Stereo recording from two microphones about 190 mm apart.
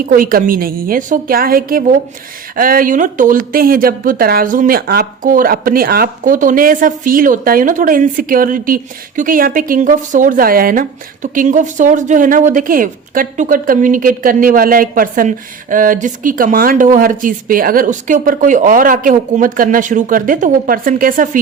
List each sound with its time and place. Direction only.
0.0 s speech: 50° right (ahead or behind)